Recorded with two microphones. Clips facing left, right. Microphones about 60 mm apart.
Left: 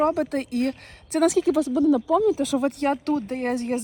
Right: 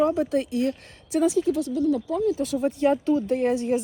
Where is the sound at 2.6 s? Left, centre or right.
Left.